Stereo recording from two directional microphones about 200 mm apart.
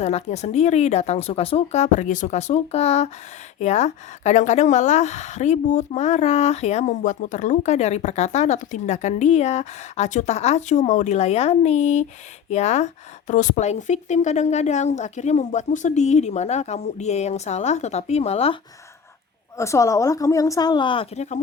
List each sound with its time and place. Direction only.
0.0 s a woman's voice: 35° left (ahead or behind)
19.5 s a woman's voice: 15° left (ahead or behind); by 21.3 s 30° left (ahead or behind)